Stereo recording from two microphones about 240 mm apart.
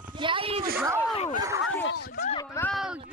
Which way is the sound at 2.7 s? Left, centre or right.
Centre.